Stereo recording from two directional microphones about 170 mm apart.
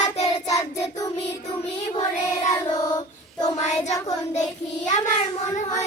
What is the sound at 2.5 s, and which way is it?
Child singing, 25° left (ahead or behind).